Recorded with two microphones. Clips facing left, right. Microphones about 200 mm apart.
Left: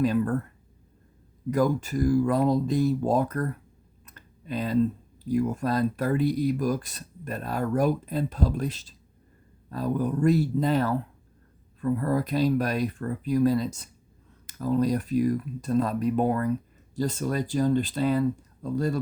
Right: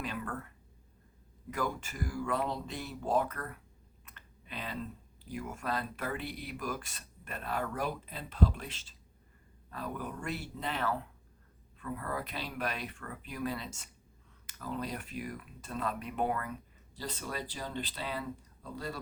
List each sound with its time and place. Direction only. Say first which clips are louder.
0.0 s speech: left 15 dB; 40° left (ahead or behind)
1.5 s speech: left 12 dB; 40° left (ahead or behind)